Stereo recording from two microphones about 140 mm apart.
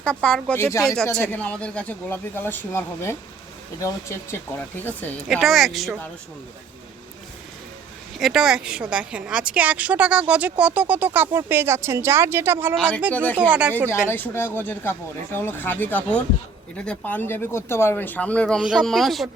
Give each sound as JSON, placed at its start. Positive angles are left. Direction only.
{"t": 0.0, "sound": "speech", "side_deg": 5}
{"t": 0.5, "sound": "speech", "side_deg": 20}
{"t": 5.3, "sound": "speech", "side_deg": 0}
{"t": 8.2, "sound": "a woman's voice", "side_deg": -5}
{"t": 14.1, "sound": "speech", "side_deg": 15}
{"t": 18.6, "sound": "speech", "side_deg": -5}